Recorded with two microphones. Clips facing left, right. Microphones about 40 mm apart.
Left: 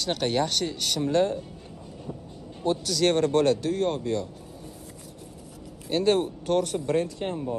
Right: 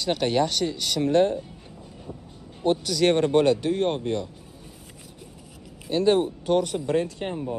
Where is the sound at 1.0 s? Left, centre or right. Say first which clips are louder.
Right 3 dB; right.